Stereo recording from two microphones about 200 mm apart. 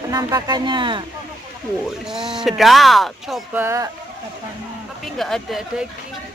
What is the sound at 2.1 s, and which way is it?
Speech, 5° right (ahead or behind).